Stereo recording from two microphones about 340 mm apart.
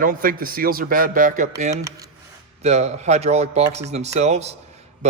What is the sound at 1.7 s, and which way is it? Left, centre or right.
Speech, centre.